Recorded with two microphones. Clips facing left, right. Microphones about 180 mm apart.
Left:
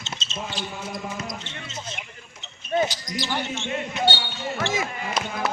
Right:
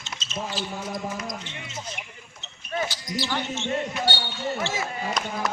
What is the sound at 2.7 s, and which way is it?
Speech, 20° left (ahead or behind).